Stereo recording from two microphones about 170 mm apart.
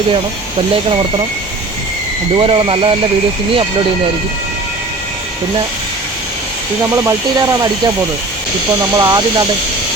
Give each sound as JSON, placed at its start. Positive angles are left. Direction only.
{"t": 2.3, "sound": "speech", "side_deg": -30}
{"t": 6.9, "sound": "speech", "side_deg": -20}
{"t": 9.0, "sound": "speech", "side_deg": -25}